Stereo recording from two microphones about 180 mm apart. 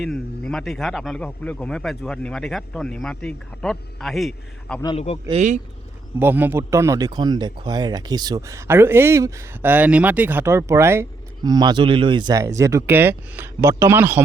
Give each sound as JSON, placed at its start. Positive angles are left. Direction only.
{"t": 0.0, "sound": "a man's voice", "side_deg": 5}
{"t": 4.9, "sound": "a man's voice", "side_deg": 35}
{"t": 5.3, "sound": "speech", "side_deg": -40}
{"t": 6.1, "sound": "speech", "side_deg": -10}